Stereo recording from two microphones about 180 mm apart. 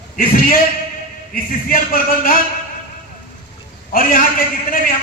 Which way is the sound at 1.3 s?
50° left (ahead or behind).